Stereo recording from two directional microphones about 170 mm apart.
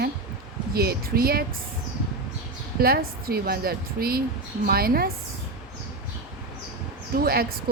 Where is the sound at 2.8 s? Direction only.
60° right (ahead or behind).